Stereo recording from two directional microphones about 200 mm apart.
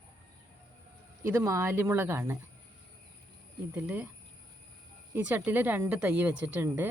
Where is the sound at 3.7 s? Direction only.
5° right (ahead or behind).